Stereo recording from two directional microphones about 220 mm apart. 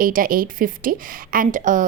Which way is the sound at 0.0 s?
40° right (ahead or behind).